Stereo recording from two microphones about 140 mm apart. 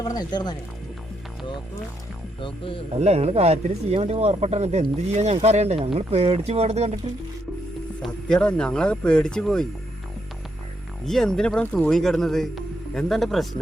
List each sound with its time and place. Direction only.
0.0 s speech: 30° left (ahead or behind)
2.4 s speech: 40° left (ahead or behind)
3.0 s speech: 50° right (ahead or behind)
8.0 s speech: 5° left (ahead or behind)
11.0 s speech: 5° left (ahead or behind)